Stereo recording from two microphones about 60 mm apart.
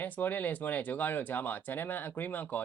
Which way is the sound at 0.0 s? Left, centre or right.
Left.